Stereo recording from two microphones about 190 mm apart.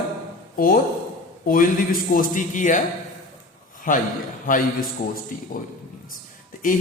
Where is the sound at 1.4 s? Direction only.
45° left (ahead or behind).